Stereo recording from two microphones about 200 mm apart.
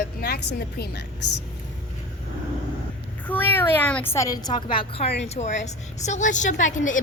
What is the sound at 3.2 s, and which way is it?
A woman's voice, 10° left (ahead or behind).